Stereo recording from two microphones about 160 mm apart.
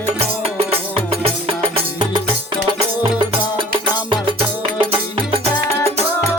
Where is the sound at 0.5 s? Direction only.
35° right (ahead or behind).